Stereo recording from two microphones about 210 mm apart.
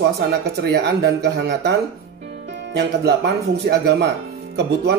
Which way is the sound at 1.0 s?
50° right (ahead or behind).